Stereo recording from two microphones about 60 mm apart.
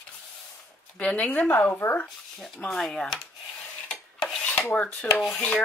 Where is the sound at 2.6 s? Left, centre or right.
Centre.